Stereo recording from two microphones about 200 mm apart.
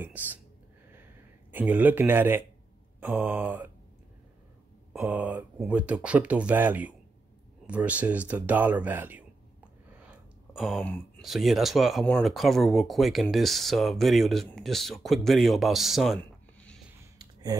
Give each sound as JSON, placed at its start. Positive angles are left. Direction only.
{"t": 0.0, "sound": "speech", "side_deg": -10}
{"t": 1.5, "sound": "speech", "side_deg": -10}
{"t": 4.9, "sound": "speech", "side_deg": -10}
{"t": 17.2, "sound": "a sound", "side_deg": -20}